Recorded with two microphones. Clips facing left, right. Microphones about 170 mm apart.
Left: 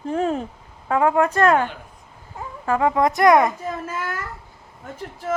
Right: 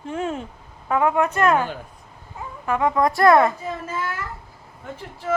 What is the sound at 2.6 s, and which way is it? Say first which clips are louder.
Speech: left 1 dB; 30° left (ahead or behind).